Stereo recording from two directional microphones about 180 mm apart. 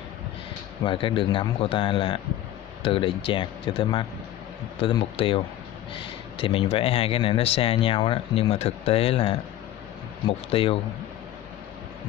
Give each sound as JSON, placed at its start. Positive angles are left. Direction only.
{"t": 0.8, "sound": "a man's voice", "side_deg": 30}